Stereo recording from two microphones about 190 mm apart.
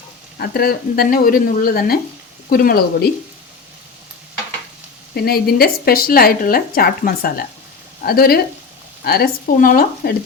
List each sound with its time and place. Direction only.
0.3 s speech: 55° left (ahead or behind)
5.1 s speech: 55° left (ahead or behind)